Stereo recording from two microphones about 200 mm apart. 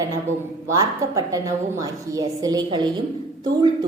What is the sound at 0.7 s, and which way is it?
A woman's voice, 15° right (ahead or behind).